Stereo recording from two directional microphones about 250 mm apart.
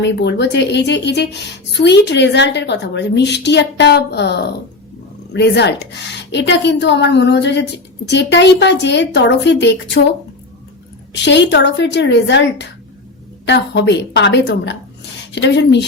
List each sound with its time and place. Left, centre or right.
0.0 s a woman's voice: left
11.1 s a woman's voice: left